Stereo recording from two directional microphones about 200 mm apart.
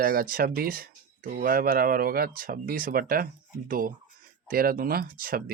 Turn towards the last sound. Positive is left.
turn(degrees=-45)  # may be behind; listen again after turning